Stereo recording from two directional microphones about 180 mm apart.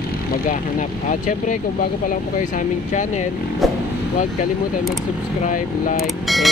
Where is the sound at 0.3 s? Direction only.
45° left (ahead or behind).